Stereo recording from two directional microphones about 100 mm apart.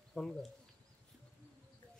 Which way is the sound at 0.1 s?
5° left (ahead or behind).